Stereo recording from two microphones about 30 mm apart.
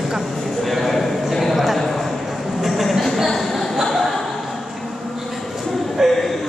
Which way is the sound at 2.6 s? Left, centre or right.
Centre.